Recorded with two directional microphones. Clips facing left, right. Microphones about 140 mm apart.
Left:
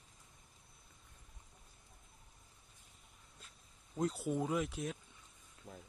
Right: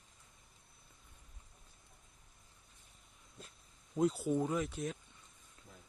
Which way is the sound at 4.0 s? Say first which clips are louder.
Right 4 dB; centre (ahead or behind).